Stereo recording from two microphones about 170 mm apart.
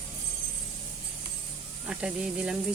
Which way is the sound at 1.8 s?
5° right (ahead or behind).